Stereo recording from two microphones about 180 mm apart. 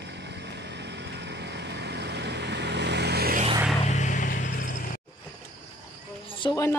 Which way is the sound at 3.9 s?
45° left (ahead or behind).